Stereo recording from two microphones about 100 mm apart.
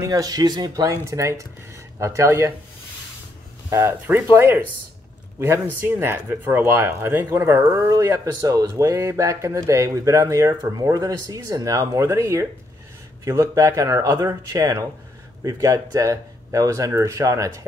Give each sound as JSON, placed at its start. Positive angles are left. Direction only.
{"t": 0.0, "sound": "speech", "side_deg": -35}
{"t": 3.7, "sound": "speech", "side_deg": -30}
{"t": 7.9, "sound": "speech", "side_deg": -35}